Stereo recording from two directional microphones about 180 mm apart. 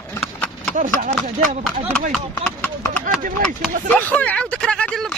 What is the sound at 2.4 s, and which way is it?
Speech, 10° left (ahead or behind).